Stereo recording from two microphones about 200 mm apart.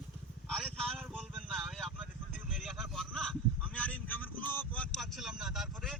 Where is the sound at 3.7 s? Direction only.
5° left (ahead or behind).